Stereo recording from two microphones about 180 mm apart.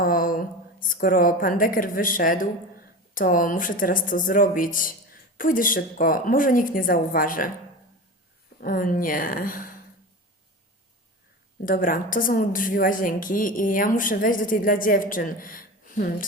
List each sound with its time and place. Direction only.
0.0 s a woman's voice: 50° left (ahead or behind)
8.6 s a woman's voice: 50° left (ahead or behind)
11.6 s a woman's voice: 50° left (ahead or behind)